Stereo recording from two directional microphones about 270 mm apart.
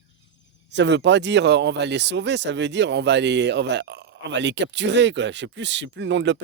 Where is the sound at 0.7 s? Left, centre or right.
Right.